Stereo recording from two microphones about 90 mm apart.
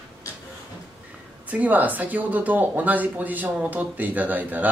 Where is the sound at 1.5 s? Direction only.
15° right (ahead or behind).